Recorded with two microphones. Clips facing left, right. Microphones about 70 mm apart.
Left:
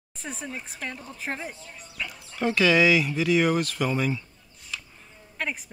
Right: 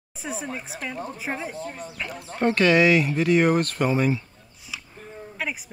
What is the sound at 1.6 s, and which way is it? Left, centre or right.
Speech, right.